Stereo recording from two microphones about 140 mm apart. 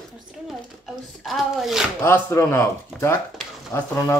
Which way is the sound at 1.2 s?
Centre (ahead or behind).